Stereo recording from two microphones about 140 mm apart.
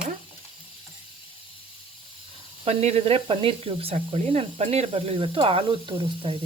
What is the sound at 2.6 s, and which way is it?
Speech, 50° right (ahead or behind).